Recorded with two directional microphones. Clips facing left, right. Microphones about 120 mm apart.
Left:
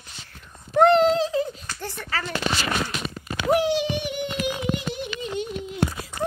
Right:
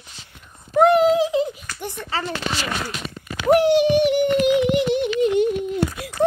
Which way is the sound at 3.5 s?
60° right (ahead or behind).